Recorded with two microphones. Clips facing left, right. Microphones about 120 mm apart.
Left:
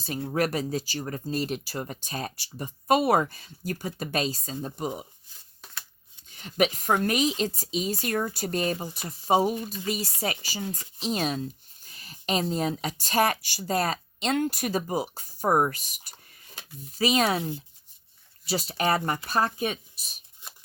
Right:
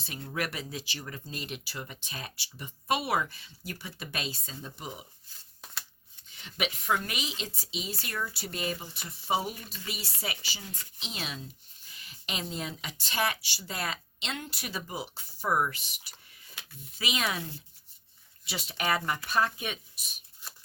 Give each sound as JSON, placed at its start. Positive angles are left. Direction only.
{"t": 0.0, "sound": "speech", "side_deg": 35}
{"t": 6.3, "sound": "a woman's voice", "side_deg": 45}
{"t": 20.4, "sound": "a sound", "side_deg": 20}